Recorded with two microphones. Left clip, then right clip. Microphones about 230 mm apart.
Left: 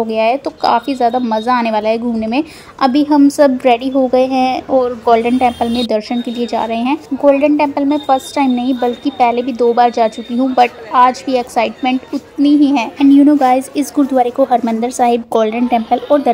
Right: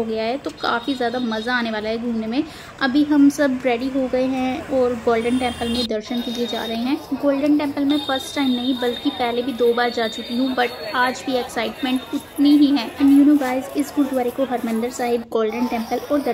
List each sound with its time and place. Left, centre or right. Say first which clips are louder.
0.1 s a woman's voice: left 10 dB; left
12.4 s a child's voice: left 4 dB; left
13.4 s a woman's voice: left 10 dB; left